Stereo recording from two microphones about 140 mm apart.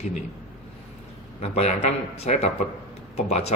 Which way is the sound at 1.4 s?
50° left (ahead or behind).